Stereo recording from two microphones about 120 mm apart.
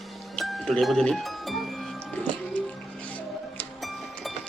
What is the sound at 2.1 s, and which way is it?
Music, 10° left (ahead or behind).